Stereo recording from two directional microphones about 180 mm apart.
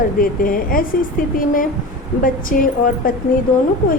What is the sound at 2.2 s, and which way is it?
Speech, 50° left (ahead or behind).